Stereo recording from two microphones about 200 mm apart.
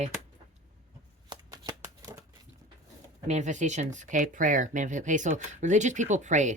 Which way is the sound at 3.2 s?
35° right (ahead or behind).